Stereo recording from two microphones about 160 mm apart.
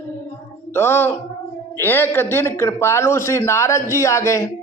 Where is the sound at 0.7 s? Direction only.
15° left (ahead or behind).